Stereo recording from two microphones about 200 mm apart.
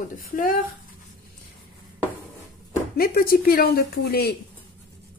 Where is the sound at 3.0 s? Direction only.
45° left (ahead or behind).